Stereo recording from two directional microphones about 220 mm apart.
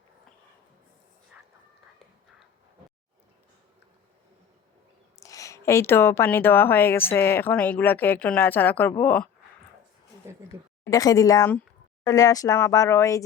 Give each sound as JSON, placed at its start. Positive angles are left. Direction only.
{"t": 5.2, "sound": "speech", "side_deg": 15}
{"t": 10.8, "sound": "speech", "side_deg": 15}